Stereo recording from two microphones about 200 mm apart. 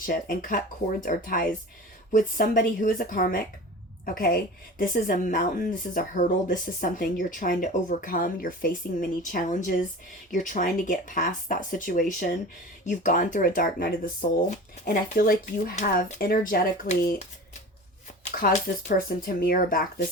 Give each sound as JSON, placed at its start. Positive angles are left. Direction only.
{"t": 0.0, "sound": "a woman's voice", "side_deg": 45}
{"t": 18.3, "sound": "a woman's voice", "side_deg": 40}